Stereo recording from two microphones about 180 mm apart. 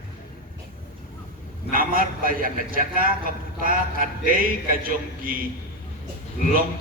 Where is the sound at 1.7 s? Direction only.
50° right (ahead or behind).